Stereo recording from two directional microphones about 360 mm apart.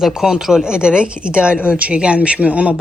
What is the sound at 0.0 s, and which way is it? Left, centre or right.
A woman's voice, centre.